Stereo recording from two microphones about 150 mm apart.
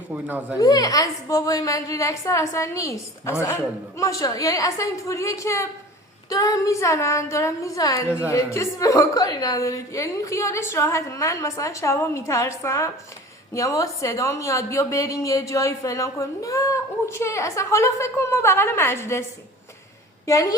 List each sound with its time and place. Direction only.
0.1 s speech: 10° right (ahead or behind)
0.6 s a woman's voice: 25° left (ahead or behind)
20.2 s a woman's voice: 20° left (ahead or behind)